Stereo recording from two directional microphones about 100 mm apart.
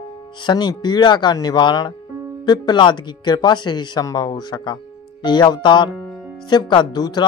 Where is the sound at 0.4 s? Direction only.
50° left (ahead or behind).